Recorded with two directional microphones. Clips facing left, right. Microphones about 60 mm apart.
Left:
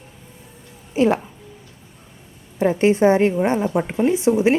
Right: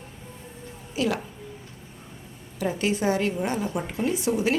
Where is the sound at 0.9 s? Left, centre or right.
Left.